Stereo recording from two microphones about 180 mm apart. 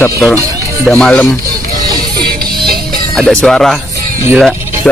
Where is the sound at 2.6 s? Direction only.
55° right (ahead or behind).